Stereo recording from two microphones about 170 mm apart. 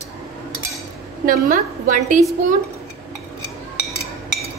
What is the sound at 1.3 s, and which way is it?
Speech, 50° right (ahead or behind).